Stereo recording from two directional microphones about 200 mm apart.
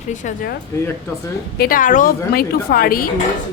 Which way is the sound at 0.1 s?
40° left (ahead or behind).